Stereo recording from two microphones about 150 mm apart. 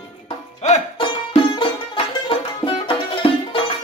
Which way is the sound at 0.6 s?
50° left (ahead or behind).